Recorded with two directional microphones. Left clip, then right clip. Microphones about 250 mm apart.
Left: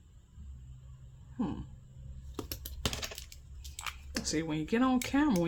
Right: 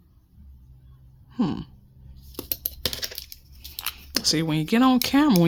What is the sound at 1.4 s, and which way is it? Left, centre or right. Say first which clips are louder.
Speech: right 10 dB; right.